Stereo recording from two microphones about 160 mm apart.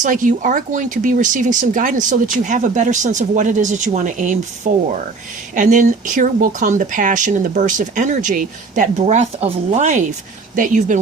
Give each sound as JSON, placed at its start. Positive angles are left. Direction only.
{"t": 0.0, "sound": "speech", "side_deg": -55}